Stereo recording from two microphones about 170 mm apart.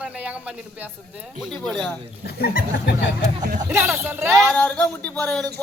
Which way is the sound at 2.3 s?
65° left (ahead or behind).